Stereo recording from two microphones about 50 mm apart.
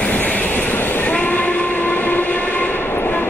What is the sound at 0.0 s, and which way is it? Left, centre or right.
Train, left.